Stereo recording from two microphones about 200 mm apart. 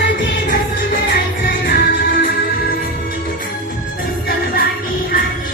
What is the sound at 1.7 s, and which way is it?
Music, 45° left (ahead or behind).